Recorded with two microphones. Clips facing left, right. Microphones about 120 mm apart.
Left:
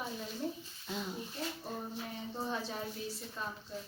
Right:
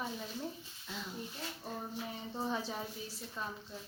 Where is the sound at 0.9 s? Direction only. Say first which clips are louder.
Left 5 dB; 20° left (ahead or behind).